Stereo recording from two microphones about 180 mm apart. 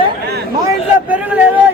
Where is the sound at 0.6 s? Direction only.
10° right (ahead or behind).